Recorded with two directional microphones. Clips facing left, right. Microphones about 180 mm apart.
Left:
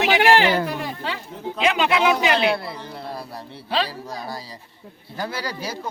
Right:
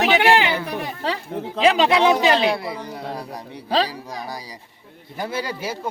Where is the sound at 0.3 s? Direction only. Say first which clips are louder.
Left 2 dB; 40° left (ahead or behind).